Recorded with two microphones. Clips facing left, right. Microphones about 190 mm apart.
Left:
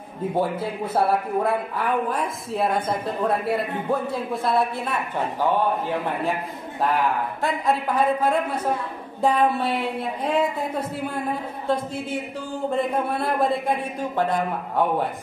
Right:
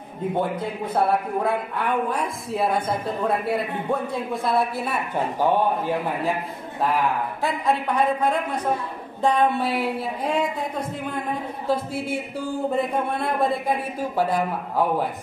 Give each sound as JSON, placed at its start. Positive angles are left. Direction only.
{"t": 0.4, "sound": "a woman's voice", "side_deg": 5}
{"t": 5.1, "sound": "a man's voice", "side_deg": -15}
{"t": 6.8, "sound": "a woman's voice", "side_deg": 0}
{"t": 11.6, "sound": "a woman's voice", "side_deg": -5}